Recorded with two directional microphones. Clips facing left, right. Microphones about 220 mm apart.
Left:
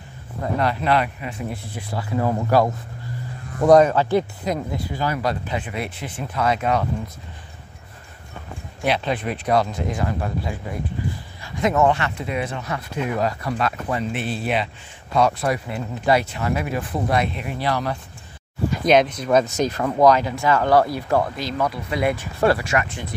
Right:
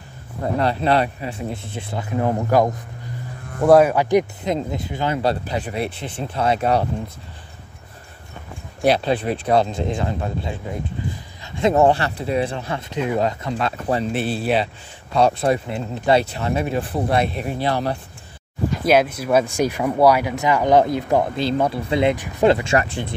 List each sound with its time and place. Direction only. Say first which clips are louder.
0.6 s speech: right 2 dB; 30° right (ahead or behind)
3.6 s speech: right 1 dB; 5° right (ahead or behind); by 6.9 s 30° right (ahead or behind)
8.8 s speech: right 4 dB; 35° right (ahead or behind)
18.9 s speech: even; 5° right (ahead or behind); by 23.1 s 30° right (ahead or behind)